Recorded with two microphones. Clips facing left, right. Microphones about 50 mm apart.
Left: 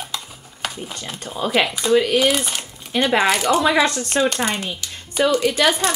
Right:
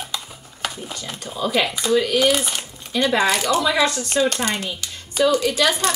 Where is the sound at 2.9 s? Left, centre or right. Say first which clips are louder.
Left 1 dB; left.